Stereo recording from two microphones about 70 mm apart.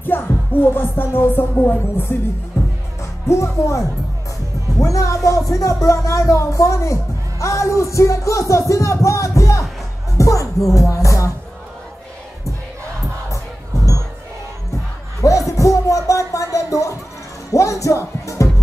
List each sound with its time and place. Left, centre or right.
0.0 s music: left
3.3 s speech: left
15.2 s music: left
17.5 s speech: left